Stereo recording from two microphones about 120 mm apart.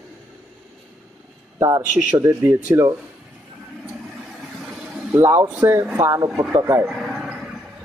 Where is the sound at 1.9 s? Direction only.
10° right (ahead or behind).